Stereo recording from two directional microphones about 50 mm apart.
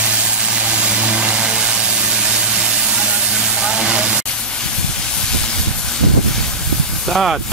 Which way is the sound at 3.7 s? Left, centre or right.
Centre.